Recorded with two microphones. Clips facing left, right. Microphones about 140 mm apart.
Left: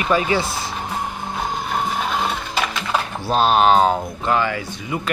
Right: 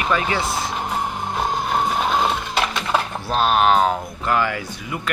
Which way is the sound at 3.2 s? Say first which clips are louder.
Left 3 dB; 30° left (ahead or behind).